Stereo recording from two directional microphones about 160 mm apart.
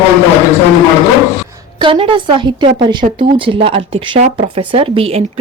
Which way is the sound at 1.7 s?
35° right (ahead or behind).